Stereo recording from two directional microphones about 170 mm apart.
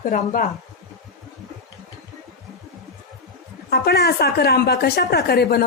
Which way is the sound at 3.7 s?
70° left (ahead or behind).